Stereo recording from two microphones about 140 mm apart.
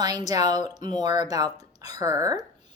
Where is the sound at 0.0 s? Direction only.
30° right (ahead or behind).